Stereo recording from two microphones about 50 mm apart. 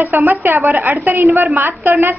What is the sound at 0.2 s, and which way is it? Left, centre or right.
A woman's voice, right.